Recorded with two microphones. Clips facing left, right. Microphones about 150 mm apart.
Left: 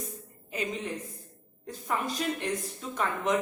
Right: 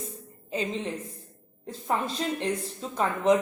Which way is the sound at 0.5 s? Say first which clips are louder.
Right 3 dB; 30° right (ahead or behind).